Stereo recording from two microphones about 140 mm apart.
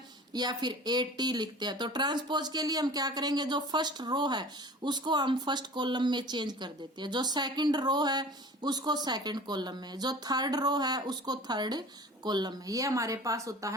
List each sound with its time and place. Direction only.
0.3 s speech: 30° right (ahead or behind)